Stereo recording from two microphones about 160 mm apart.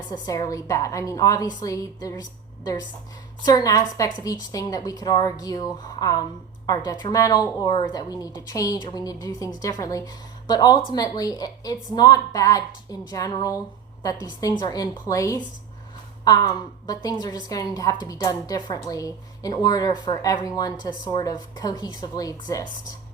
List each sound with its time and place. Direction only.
0.1 s a woman's voice: 25° left (ahead or behind)
3.4 s a woman's voice: 25° left (ahead or behind)